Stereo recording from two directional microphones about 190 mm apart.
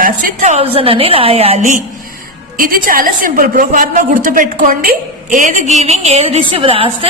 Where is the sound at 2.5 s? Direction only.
50° right (ahead or behind).